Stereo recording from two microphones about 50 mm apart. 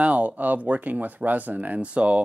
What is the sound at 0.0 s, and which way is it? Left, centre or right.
Speech, right.